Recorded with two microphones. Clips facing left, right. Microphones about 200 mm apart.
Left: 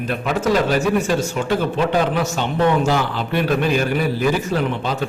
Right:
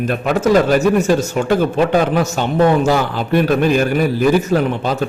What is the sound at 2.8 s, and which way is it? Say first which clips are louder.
A man's voice: right 4 dB; 45° right (ahead or behind).